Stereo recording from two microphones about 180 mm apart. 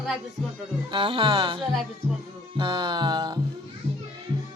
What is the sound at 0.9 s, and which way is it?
Music, 30° right (ahead or behind).